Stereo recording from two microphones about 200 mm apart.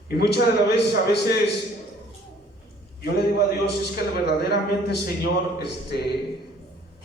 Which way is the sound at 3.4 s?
55° left (ahead or behind).